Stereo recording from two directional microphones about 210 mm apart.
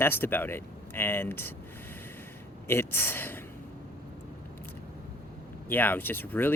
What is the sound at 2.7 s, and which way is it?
Speech, 10° left (ahead or behind).